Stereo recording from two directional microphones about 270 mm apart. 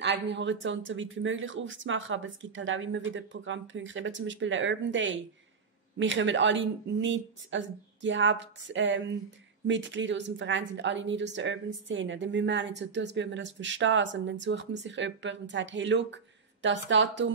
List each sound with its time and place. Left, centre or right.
0.0 s a woman's voice: right